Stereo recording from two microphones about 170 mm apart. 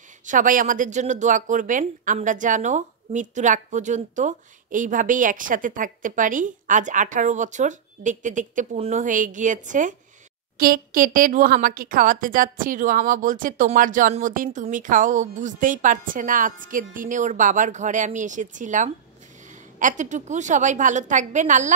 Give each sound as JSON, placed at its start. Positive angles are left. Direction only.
{"t": 0.2, "sound": "speech", "side_deg": -50}